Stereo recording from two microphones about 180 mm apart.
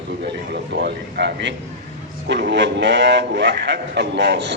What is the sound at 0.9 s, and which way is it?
A man's voice, 70° right (ahead or behind).